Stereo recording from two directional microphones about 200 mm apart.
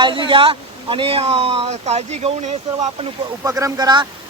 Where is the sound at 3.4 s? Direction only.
15° right (ahead or behind).